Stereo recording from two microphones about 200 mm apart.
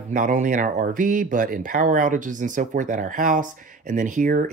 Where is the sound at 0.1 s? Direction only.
40° right (ahead or behind).